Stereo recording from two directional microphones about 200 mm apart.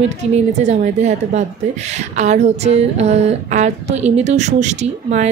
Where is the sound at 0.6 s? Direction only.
35° right (ahead or behind).